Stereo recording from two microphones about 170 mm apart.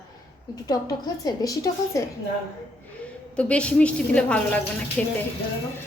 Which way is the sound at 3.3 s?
5° left (ahead or behind).